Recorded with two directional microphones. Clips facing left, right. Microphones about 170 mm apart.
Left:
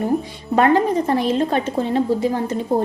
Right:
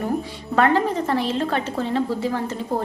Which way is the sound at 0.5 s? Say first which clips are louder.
Left 3 dB; 20° left (ahead or behind).